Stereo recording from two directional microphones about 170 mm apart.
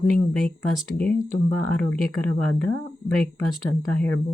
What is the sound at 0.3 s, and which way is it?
Speech, centre (ahead or behind).